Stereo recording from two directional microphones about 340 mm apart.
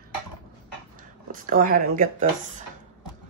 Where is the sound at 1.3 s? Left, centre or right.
Right.